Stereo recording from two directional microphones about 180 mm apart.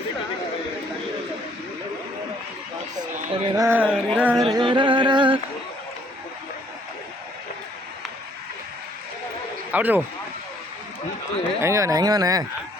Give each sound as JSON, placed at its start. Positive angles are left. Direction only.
{"t": 2.9, "sound": "a sound", "side_deg": -25}
{"t": 3.5, "sound": "music", "side_deg": -15}
{"t": 4.5, "sound": "music", "side_deg": -25}
{"t": 9.7, "sound": "music", "side_deg": -10}
{"t": 11.6, "sound": "speech", "side_deg": -15}